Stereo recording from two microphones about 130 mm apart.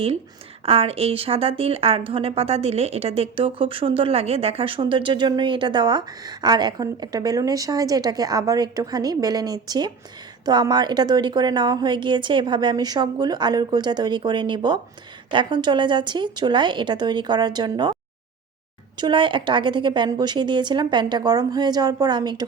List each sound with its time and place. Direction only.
0.6 s a woman's voice: 50° right (ahead or behind)
18.9 s a woman's voice: 35° right (ahead or behind)